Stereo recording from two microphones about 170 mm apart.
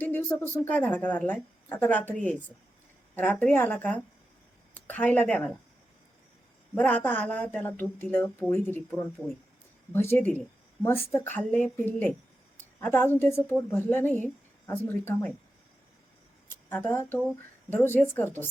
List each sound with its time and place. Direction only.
0.0 s a woman's voice: 10° left (ahead or behind)
3.2 s a woman's voice: 10° left (ahead or behind)
6.7 s a woman's voice: 10° left (ahead or behind)
9.9 s a woman's voice: 15° left (ahead or behind)
12.5 s a sound: 10° left (ahead or behind)
13.1 s a woman's voice: 15° left (ahead or behind)
16.6 s a woman's voice: 10° left (ahead or behind)